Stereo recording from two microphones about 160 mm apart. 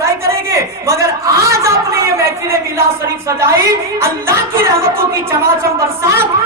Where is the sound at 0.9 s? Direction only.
20° right (ahead or behind).